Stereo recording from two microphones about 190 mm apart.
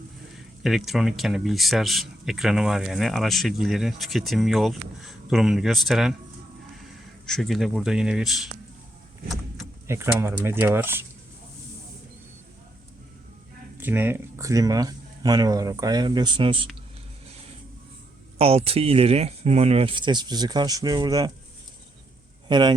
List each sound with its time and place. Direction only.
0.3 s speech: centre (ahead or behind)
7.3 s speech: centre (ahead or behind)
9.8 s speech: 15° right (ahead or behind)
13.7 s speech: 10° right (ahead or behind); by 16.6 s 25° right (ahead or behind)
18.3 s speech: 30° right (ahead or behind)
22.4 s speech: 25° right (ahead or behind)